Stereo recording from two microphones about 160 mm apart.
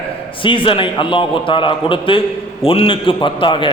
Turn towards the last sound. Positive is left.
turn(degrees=30)  # may be behind; listen again after turning